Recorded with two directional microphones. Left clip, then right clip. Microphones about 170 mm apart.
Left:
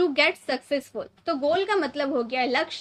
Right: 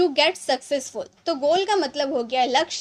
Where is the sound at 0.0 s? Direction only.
25° right (ahead or behind).